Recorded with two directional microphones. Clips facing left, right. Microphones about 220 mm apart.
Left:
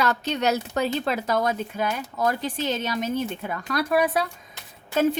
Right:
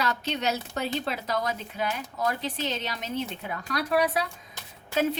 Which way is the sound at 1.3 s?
45° left (ahead or behind).